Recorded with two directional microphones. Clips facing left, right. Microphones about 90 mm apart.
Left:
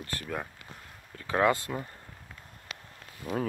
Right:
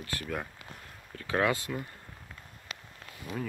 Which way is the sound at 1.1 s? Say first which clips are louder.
Left 3 dB; 20° left (ahead or behind).